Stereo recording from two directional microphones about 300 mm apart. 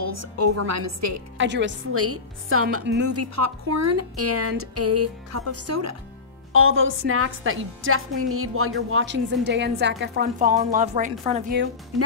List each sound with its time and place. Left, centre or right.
0.0 s a woman's voice: right
1.4 s speech: right
2.8 s a woman's voice: right
3.1 s a woman's voice: right
6.5 s a woman's voice: right